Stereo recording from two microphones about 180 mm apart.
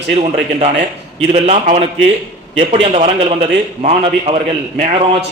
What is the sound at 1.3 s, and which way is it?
Speech, 40° right (ahead or behind).